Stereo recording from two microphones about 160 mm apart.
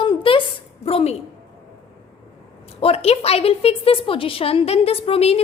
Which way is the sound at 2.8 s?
40° left (ahead or behind).